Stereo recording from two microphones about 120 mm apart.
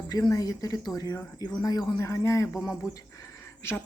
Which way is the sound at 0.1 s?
30° left (ahead or behind).